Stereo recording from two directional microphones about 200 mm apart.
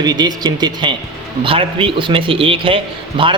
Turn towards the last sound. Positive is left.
turn(degrees=-25)  # may be behind; listen again after turning